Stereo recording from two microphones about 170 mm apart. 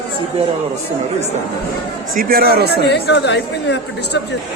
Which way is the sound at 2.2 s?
60° right (ahead or behind).